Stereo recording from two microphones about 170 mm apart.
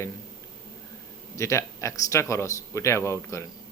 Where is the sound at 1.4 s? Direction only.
15° left (ahead or behind).